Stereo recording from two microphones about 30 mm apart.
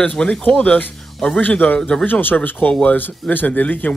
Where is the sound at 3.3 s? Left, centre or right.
Left.